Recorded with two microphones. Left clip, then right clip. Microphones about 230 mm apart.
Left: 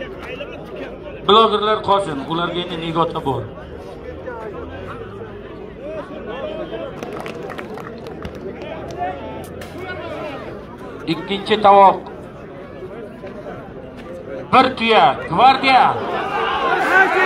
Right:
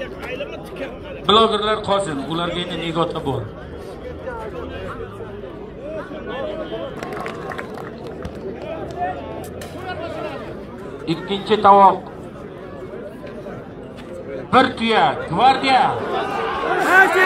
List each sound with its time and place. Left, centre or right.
0.0 s a sound: right
1.2 s a man's voice: left
11.1 s a man's voice: left
14.5 s a man's voice: left
16.9 s speech: right